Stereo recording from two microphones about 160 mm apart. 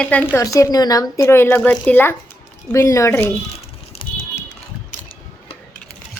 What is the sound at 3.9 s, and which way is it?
Typing, 35° left (ahead or behind).